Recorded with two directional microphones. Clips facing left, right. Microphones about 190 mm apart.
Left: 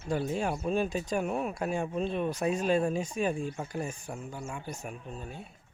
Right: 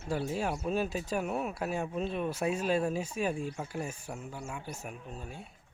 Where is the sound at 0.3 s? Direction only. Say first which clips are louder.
Left 2 dB; 5° right (ahead or behind).